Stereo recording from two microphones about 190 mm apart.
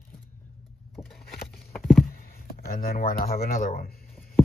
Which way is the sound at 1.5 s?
Centre (ahead or behind).